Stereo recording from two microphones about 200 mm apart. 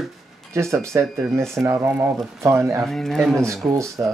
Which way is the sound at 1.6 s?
10° right (ahead or behind).